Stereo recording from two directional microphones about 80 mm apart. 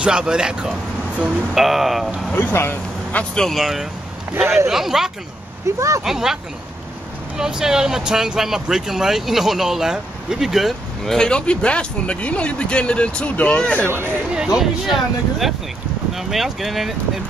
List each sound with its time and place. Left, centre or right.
0.0 s speech: centre
1.5 s speech: centre
2.3 s speech: left
3.3 s speech: centre
5.8 s speech: right
6.0 s speech: centre
7.3 s speech: centre
14.3 s speech: centre